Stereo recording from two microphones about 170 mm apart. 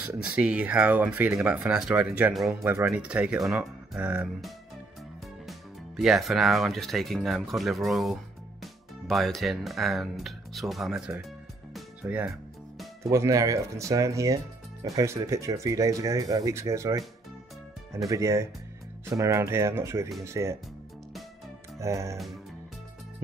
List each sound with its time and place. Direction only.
0.2 s speech: 5° right (ahead or behind)
5.5 s speech: centre (ahead or behind)
12.0 s music: 10° right (ahead or behind)
13.1 s speech: 20° right (ahead or behind)
18.0 s speech: 20° right (ahead or behind)
21.7 s speech: 20° right (ahead or behind)